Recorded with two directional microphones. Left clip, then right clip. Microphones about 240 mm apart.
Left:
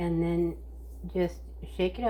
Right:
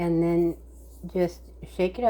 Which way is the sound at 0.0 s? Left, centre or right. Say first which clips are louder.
Right 6 dB; right.